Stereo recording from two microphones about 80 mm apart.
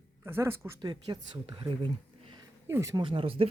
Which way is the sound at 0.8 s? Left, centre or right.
Right.